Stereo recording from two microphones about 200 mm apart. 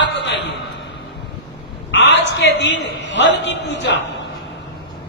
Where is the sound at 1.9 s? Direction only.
60° left (ahead or behind).